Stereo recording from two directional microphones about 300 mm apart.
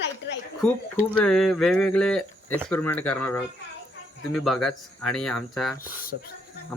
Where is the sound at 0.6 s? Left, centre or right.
Centre.